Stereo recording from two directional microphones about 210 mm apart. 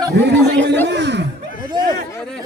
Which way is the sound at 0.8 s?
55° right (ahead or behind).